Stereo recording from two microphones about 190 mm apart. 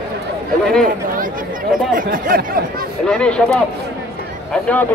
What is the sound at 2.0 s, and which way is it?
Speech, 45° right (ahead or behind).